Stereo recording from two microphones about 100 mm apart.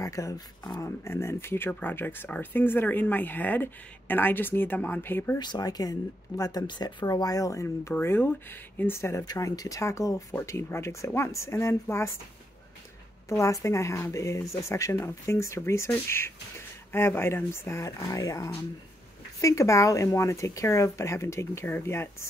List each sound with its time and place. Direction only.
0.0 s speech: 35° left (ahead or behind)
5.4 s speech: 45° left (ahead or behind)
6.7 s speech: 50° left (ahead or behind); by 9.2 s 25° left (ahead or behind)
9.2 s speech: 40° left (ahead or behind)
13.3 s speech: 30° left (ahead or behind)